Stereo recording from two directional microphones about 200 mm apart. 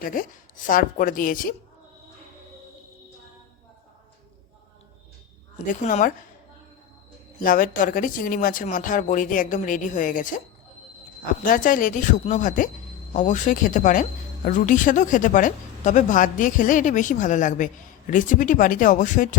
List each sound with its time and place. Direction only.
0.0 s a woman's voice: 45° left (ahead or behind)
5.6 s speech: 35° left (ahead or behind)
7.3 s speech: 40° left (ahead or behind)
11.4 s speech: 40° left (ahead or behind)